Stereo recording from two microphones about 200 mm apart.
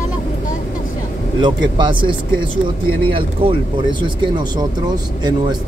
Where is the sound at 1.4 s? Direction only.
25° right (ahead or behind).